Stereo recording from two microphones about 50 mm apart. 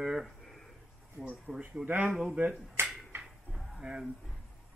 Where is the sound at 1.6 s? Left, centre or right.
Right.